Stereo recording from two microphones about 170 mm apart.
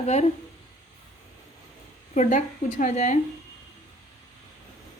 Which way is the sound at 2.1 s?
45° left (ahead or behind).